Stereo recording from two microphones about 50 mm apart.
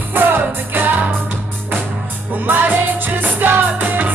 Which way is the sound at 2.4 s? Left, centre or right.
Right.